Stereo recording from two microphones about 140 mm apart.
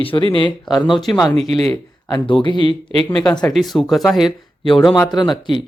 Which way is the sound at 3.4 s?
Centre (ahead or behind).